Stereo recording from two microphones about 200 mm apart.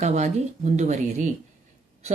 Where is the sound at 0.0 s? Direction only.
35° right (ahead or behind).